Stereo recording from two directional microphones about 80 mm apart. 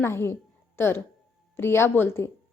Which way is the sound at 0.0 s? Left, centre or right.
Left.